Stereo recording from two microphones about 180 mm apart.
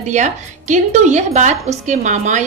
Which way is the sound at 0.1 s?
40° right (ahead or behind).